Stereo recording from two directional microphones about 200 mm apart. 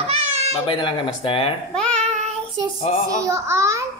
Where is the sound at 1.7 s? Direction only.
5° left (ahead or behind).